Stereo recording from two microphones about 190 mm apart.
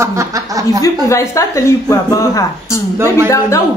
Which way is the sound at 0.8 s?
15° left (ahead or behind).